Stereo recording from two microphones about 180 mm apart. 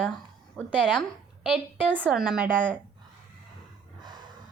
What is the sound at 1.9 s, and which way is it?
Speech, 10° right (ahead or behind).